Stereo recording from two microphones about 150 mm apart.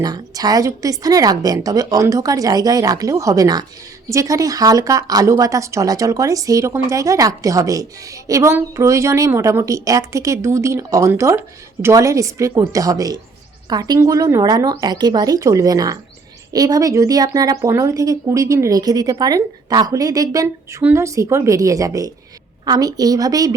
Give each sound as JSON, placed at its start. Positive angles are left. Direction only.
{"t": 0.0, "sound": "a woman's voice", "side_deg": -25}